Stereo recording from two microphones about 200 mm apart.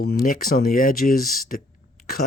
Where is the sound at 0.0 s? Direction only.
50° left (ahead or behind).